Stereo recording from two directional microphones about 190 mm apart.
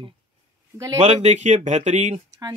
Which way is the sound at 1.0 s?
35° right (ahead or behind).